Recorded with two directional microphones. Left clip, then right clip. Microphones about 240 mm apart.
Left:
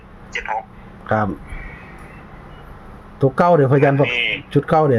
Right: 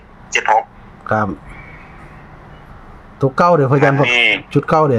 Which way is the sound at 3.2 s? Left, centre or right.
Centre.